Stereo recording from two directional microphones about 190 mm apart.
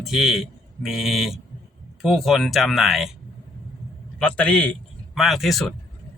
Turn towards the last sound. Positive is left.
turn(degrees=0)  # may be behind; listen again after turning